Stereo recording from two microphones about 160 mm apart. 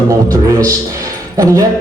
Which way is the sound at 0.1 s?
20° right (ahead or behind).